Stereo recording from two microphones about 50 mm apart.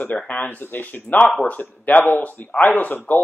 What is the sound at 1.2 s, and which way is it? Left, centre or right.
Speech, centre.